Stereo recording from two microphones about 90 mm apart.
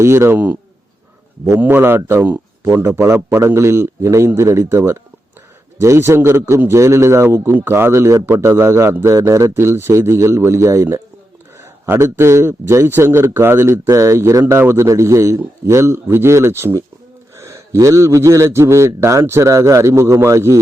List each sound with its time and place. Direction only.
0.0 s a man's voice: 30° right (ahead or behind)